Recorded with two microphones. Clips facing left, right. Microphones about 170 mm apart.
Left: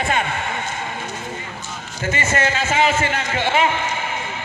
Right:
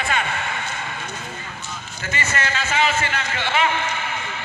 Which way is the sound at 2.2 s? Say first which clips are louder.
Left 4 dB; 25° left (ahead or behind).